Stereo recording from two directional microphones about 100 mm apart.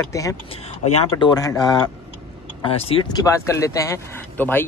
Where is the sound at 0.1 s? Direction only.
35° left (ahead or behind).